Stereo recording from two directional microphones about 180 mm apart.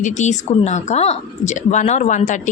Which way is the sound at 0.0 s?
45° left (ahead or behind).